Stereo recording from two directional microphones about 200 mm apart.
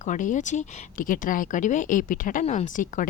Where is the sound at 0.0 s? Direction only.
40° left (ahead or behind).